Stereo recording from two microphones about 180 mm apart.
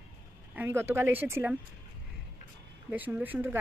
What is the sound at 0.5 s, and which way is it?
A woman's voice, 15° right (ahead or behind).